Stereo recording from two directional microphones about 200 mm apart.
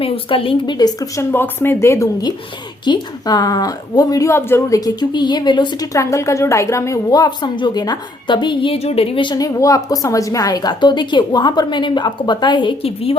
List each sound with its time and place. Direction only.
0.0 s a woman's voice: 25° left (ahead or behind)